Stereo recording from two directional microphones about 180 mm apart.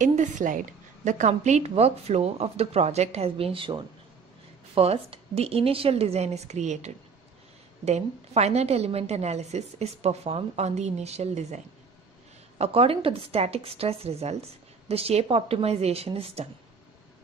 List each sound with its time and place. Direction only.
0.0 s a woman's voice: 45° right (ahead or behind)